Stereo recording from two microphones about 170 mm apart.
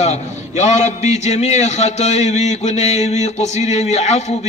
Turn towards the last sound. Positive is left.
turn(degrees=40)  # may be behind; listen again after turning